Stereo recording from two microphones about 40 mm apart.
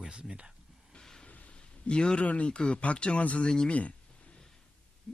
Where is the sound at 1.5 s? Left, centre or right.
Left.